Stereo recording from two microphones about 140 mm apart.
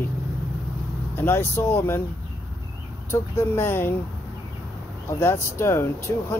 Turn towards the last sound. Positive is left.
turn(degrees=20)  # may be behind; listen again after turning